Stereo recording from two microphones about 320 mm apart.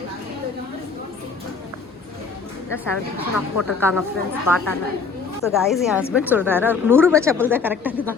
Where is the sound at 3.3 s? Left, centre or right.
Left.